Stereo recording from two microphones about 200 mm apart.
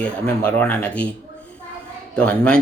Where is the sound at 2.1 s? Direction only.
5° left (ahead or behind).